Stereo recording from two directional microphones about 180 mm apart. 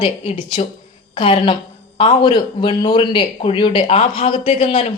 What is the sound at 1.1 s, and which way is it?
A woman's voice, 30° left (ahead or behind).